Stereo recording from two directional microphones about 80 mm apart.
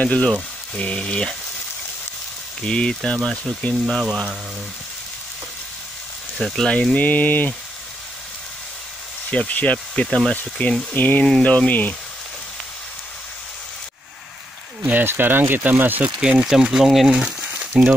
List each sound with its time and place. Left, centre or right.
0.0 s speech: centre
2.6 s speech: centre
6.3 s speech: centre
9.3 s speech: centre
10.0 s speech: centre
10.9 s speech: left
14.8 s speech: right
16.2 s speech: centre